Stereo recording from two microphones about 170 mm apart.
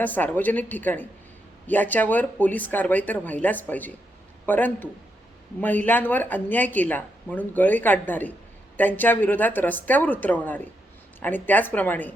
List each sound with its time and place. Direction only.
0.0 s speech: 10° left (ahead or behind)